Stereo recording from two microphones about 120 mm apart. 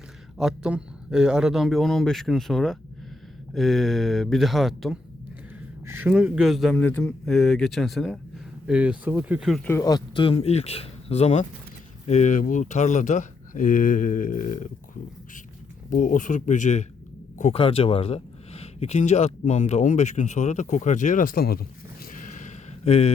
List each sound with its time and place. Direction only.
0.3 s speech: 5° right (ahead or behind)
5.8 s speech: 20° right (ahead or behind)
6.1 s speech: 10° right (ahead or behind)
9.8 s a man's voice: 35° left (ahead or behind)
10.2 s speech: 55° left (ahead or behind); by 14.7 s 90° left
15.9 s speech: 90° left
17.5 s speech: 50° left (ahead or behind); by 21.2 s 90° left
22.1 s a sound: 90° left; by 23.1 s 60° left (ahead or behind)